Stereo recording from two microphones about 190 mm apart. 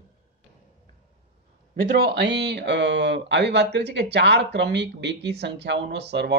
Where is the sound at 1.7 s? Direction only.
50° right (ahead or behind).